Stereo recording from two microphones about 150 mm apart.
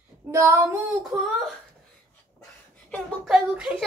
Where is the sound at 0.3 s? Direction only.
20° right (ahead or behind).